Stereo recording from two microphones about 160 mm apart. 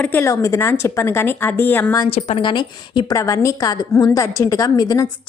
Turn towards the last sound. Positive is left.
turn(degrees=20)  # may be behind; listen again after turning